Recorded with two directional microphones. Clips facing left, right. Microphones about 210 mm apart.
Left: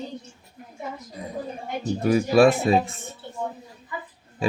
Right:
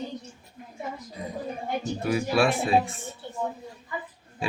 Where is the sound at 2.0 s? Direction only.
40° left (ahead or behind).